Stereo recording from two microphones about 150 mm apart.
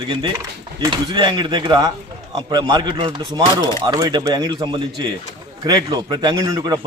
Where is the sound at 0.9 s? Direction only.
30° right (ahead or behind).